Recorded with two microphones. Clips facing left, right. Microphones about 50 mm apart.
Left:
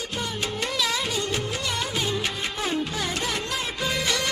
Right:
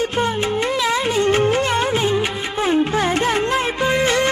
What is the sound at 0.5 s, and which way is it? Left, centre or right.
Music, right.